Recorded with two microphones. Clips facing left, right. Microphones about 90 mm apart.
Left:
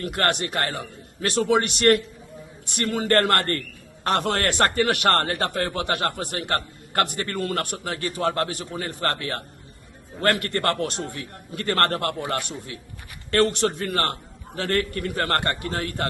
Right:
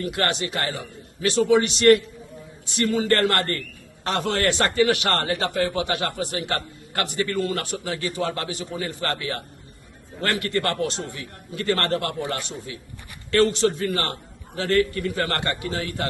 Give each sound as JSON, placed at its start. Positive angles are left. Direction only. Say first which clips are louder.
{"t": 0.0, "sound": "speech", "louder": "left 1 dB", "side_deg": 55}
{"t": 10.4, "sound": "speech", "louder": "even", "side_deg": 50}